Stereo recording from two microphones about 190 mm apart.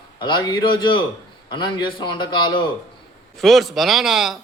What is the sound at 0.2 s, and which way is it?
A man's voice, 25° left (ahead or behind).